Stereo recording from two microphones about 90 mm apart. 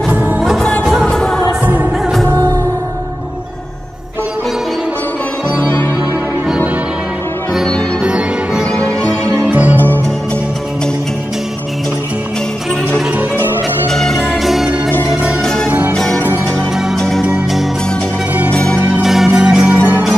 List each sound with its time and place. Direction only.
0.1 s music: 15° right (ahead or behind)
0.4 s music: 5° right (ahead or behind)
9.5 s music: 15° right (ahead or behind)
13.8 s music: 5° left (ahead or behind)
18.5 s zither: 10° left (ahead or behind)
18.9 s music: centre (ahead or behind)